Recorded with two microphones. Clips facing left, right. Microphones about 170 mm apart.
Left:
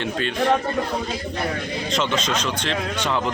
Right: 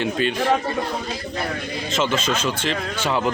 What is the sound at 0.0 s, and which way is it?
Speech, 5° right (ahead or behind).